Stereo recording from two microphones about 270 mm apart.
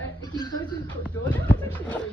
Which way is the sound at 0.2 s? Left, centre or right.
Centre.